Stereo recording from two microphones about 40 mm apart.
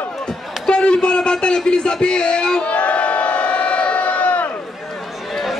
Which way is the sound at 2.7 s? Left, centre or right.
Left.